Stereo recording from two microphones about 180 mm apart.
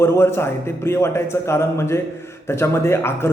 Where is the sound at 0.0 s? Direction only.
15° left (ahead or behind).